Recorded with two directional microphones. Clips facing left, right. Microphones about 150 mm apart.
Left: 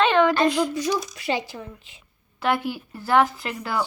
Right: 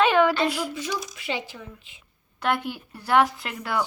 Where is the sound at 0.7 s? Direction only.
40° left (ahead or behind).